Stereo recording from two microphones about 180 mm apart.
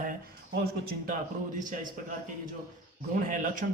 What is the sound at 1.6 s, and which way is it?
A man's voice, 45° right (ahead or behind).